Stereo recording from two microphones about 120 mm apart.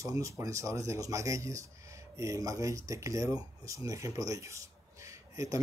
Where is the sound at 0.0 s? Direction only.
25° right (ahead or behind).